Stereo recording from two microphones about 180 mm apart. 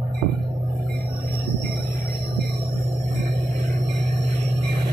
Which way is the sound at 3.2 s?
45° right (ahead or behind).